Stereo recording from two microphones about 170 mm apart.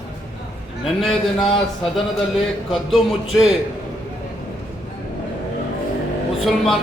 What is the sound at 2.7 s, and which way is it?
Speech, centre (ahead or behind).